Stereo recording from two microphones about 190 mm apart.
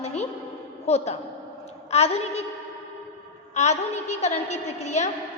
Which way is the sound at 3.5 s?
35° left (ahead or behind).